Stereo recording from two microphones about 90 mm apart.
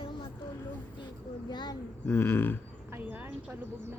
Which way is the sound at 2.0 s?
25° left (ahead or behind).